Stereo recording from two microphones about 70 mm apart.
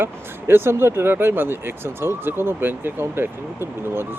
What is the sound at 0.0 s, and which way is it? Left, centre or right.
Speech, right.